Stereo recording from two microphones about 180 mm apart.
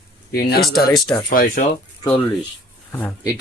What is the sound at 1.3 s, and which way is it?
Speech, 50° left (ahead or behind).